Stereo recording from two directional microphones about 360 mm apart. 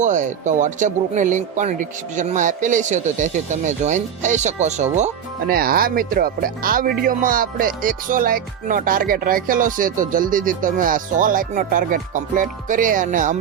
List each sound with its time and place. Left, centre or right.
0.0 s speech: centre